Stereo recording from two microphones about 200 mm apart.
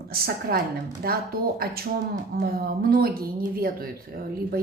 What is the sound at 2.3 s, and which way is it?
Speech, 50° right (ahead or behind).